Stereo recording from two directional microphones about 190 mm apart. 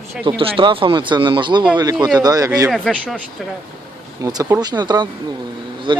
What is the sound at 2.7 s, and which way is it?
Speech, 5° left (ahead or behind).